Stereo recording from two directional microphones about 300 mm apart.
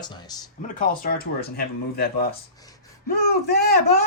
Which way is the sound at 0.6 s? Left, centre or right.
Left.